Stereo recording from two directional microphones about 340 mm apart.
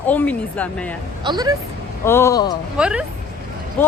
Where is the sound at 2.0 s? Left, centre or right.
Centre.